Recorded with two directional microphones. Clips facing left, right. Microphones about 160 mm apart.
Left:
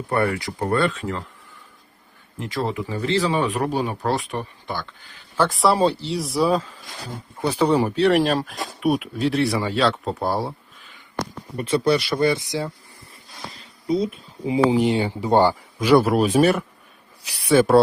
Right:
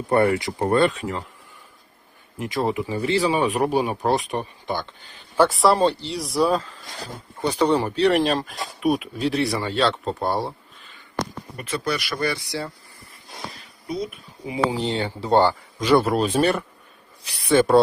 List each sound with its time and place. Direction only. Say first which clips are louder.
0.1 s speech: right 4 dB; 25° right (ahead or behind)
2.4 s speech: right 2 dB; 15° right (ahead or behind)
5.5 s speech: even; 5° left (ahead or behind)
11.5 s speech: left 7 dB; 30° left (ahead or behind)
13.8 s speech: left 7 dB; 25° left (ahead or behind)
14.8 s speech: left 5 dB; 10° left (ahead or behind)